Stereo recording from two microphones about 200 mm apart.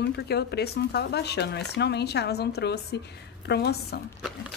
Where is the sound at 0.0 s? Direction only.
55° left (ahead or behind).